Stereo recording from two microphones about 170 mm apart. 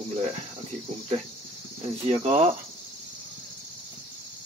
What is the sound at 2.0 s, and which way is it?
Speech, 40° right (ahead or behind).